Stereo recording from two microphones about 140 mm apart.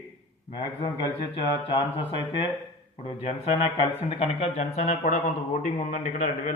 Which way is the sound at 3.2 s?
45° left (ahead or behind).